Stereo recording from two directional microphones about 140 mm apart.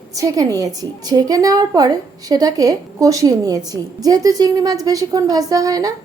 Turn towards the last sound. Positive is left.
turn(degrees=-25)  # may be behind; listen again after turning